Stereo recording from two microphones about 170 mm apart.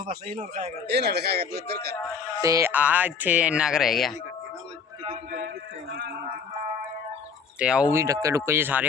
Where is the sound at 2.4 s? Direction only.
15° right (ahead or behind); by 4.1 s centre (ahead or behind).